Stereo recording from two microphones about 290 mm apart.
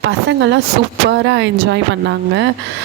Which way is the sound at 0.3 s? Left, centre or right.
Right.